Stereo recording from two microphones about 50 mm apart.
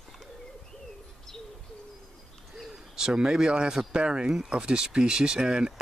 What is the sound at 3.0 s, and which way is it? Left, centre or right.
Speech, centre.